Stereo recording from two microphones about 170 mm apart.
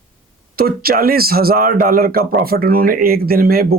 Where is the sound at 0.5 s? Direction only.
60° right (ahead or behind).